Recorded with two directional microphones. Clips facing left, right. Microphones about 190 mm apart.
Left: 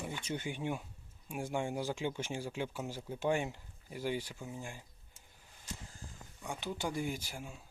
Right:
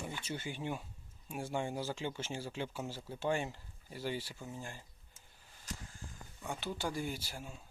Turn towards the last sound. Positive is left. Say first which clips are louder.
# left 1 dB
turn(degrees=10)  # may be behind; listen again after turning